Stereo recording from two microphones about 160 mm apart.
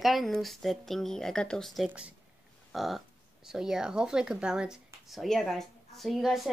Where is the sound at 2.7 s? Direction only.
Centre (ahead or behind).